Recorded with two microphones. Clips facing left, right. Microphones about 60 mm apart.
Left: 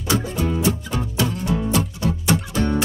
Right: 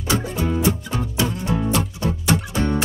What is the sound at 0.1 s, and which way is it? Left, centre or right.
Music, right.